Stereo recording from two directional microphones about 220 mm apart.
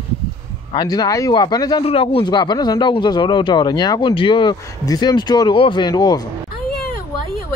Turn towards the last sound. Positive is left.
turn(degrees=20)  # may be behind; listen again after turning